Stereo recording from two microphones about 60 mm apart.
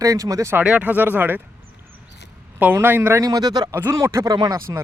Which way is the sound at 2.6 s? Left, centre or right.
Right.